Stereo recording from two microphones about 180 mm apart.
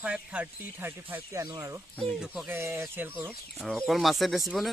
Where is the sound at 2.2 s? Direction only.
5° right (ahead or behind).